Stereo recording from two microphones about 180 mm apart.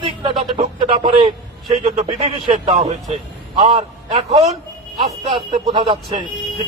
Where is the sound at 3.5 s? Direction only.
40° right (ahead or behind).